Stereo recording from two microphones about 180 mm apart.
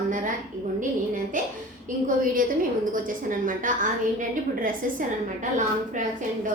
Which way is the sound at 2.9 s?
50° right (ahead or behind).